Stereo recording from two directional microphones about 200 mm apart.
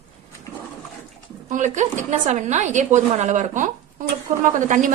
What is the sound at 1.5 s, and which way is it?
A woman's voice, 35° right (ahead or behind).